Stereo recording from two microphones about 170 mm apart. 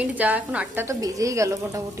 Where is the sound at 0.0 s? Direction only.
10° right (ahead or behind).